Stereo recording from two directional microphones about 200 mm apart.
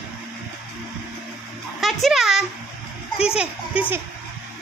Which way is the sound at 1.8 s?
Centre (ahead or behind).